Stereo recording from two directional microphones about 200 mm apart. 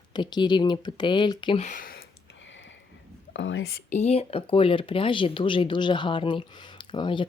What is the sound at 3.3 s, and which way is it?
Speech, 65° left (ahead or behind).